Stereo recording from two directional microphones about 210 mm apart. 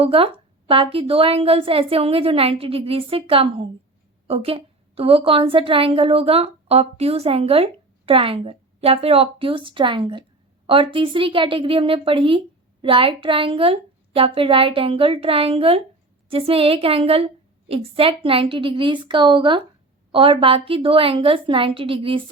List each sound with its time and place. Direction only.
0.0 s a woman's voice: 25° right (ahead or behind)